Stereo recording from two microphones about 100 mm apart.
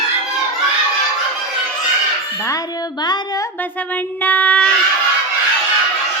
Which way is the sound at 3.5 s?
15° left (ahead or behind).